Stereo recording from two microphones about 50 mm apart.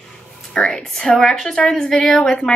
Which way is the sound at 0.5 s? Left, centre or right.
Centre.